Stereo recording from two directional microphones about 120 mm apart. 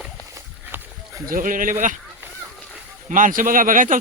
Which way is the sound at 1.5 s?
90° right.